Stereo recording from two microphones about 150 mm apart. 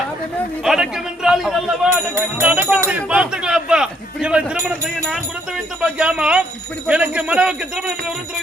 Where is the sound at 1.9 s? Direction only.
15° right (ahead or behind).